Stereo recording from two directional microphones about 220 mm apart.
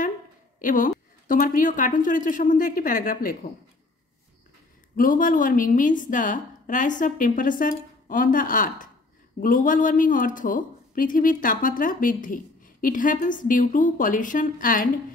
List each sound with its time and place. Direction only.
0.6 s a woman's voice: 35° left (ahead or behind)
4.9 s a woman's voice: 40° left (ahead or behind)